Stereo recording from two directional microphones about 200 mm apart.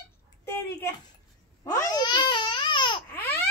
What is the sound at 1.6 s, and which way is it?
Babbling, 20° left (ahead or behind).